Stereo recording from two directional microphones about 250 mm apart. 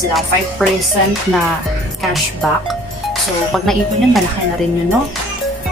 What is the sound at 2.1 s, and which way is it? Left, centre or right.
Speech, centre.